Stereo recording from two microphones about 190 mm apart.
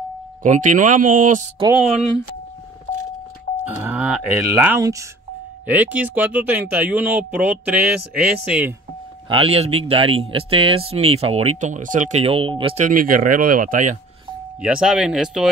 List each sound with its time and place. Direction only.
0.4 s speech: 40° right (ahead or behind)
1.7 s speech: 5° right (ahead or behind)
3.6 s speech: 10° right (ahead or behind)
9.3 s speech: 30° right (ahead or behind)
12.8 s speech: 45° right (ahead or behind)
14.6 s speech: 5° right (ahead or behind)